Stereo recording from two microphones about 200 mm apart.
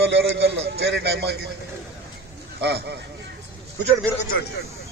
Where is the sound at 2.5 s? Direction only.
55° right (ahead or behind).